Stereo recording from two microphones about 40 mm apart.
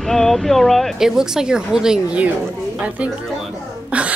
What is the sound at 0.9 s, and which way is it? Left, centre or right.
A woman's voice, centre.